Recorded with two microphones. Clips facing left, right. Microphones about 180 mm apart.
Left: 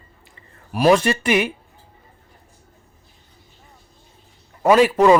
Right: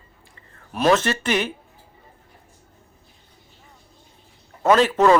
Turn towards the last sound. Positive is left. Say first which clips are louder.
# left 3 dB
turn(degrees=10)  # may be behind; listen again after turning